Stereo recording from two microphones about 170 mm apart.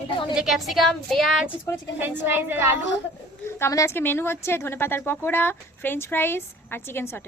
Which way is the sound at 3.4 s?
15° left (ahead or behind).